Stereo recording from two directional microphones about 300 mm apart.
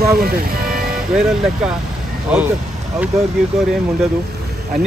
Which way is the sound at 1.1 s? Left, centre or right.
Centre.